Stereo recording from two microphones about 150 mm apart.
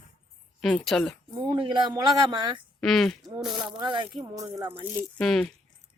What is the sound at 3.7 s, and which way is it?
Speech, 30° right (ahead or behind).